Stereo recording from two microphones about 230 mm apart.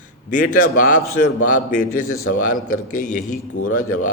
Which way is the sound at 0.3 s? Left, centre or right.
Left.